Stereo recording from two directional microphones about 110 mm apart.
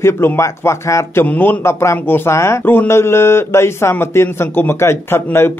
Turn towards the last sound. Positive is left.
turn(degrees=20)  # may be behind; listen again after turning